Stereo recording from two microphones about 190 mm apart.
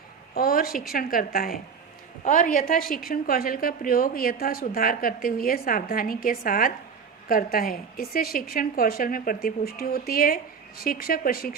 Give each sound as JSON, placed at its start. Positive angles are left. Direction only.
{"t": 0.3, "sound": "a woman's voice", "side_deg": 50}